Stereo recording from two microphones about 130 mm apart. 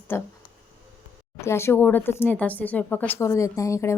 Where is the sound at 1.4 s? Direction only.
20° left (ahead or behind).